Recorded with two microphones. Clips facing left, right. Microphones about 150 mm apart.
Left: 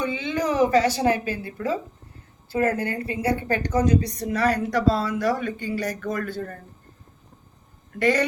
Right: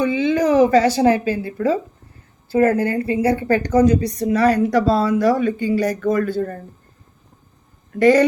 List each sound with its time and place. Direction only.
0.2 s a woman's voice: 35° right (ahead or behind)
7.9 s a woman's voice: 40° right (ahead or behind)